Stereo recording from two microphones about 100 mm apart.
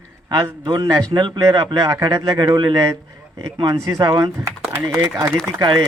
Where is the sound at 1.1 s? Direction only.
50° right (ahead or behind).